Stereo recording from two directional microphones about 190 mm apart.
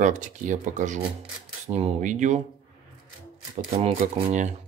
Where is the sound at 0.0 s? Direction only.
40° right (ahead or behind).